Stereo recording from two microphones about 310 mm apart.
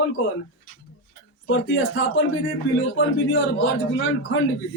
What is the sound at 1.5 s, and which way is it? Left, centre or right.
A man's voice, left.